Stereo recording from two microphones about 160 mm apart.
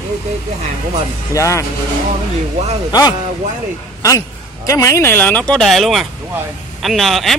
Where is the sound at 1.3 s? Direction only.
20° left (ahead or behind).